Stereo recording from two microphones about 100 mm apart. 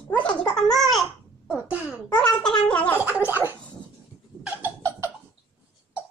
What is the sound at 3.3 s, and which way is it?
Gargling, 20° right (ahead or behind).